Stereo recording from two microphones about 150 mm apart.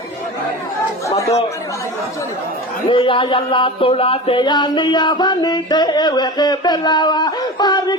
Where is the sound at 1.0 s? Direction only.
20° left (ahead or behind).